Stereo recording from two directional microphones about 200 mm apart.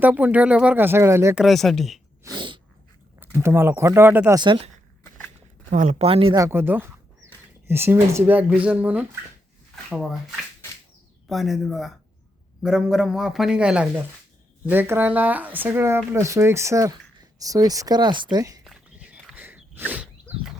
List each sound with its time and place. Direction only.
0.0 s speech: 10° right (ahead or behind)
1.5 s a man's voice: centre (ahead or behind)
2.2 s sneeze: 25° right (ahead or behind)
3.2 s speech: 10° right (ahead or behind)
4.4 s speech: 25° right (ahead or behind)
5.7 s speech: 35° right (ahead or behind)
6.3 s a man's voice: 15° right (ahead or behind)
11.3 s a man's voice: centre (ahead or behind); by 18.6 s 20° right (ahead or behind)
18.6 s walk: 5° right (ahead or behind)
19.7 s a sound: 10° right (ahead or behind)